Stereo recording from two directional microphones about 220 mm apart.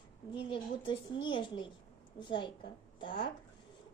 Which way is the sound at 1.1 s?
20° left (ahead or behind).